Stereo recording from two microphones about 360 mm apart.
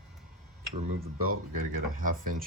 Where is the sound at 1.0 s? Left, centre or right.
Right.